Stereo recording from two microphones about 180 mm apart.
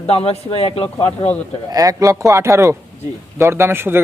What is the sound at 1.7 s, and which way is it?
Speech, 20° right (ahead or behind).